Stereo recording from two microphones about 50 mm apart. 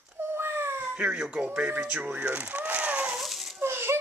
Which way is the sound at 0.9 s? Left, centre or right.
Right.